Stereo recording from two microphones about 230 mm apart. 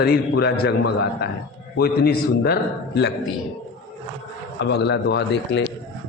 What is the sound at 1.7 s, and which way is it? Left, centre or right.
Speech, left.